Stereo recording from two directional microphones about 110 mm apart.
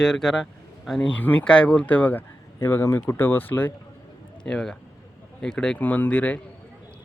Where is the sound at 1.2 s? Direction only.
15° left (ahead or behind).